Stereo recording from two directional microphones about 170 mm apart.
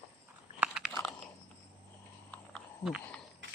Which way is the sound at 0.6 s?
5° right (ahead or behind).